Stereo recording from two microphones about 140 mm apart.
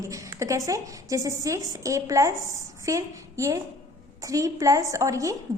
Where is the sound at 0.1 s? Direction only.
25° right (ahead or behind).